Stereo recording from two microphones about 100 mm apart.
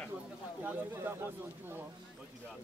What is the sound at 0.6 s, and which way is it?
Speech, 20° right (ahead or behind).